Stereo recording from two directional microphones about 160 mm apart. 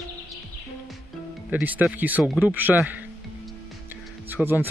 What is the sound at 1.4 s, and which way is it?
Speech, 10° right (ahead or behind).